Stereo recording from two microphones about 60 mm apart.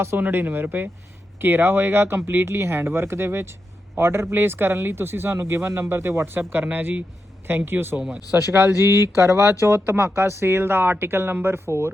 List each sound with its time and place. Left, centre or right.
0.2 s speech: right
7.9 s speech: centre
8.5 s speech: right